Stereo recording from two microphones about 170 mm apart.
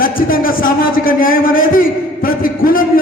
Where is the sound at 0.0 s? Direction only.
55° left (ahead or behind).